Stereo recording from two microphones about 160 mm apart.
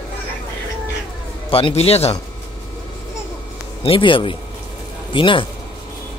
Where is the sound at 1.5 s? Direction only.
35° left (ahead or behind).